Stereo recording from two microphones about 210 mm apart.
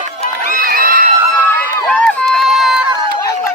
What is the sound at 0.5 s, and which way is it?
Crowd, 45° right (ahead or behind).